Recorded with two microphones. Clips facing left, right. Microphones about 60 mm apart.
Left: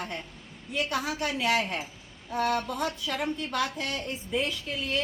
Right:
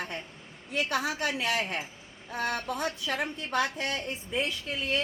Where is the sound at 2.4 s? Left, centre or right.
Right.